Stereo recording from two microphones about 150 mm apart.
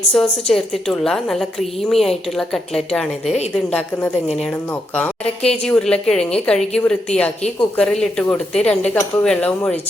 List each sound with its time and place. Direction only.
0.1 s a woman's voice: centre (ahead or behind)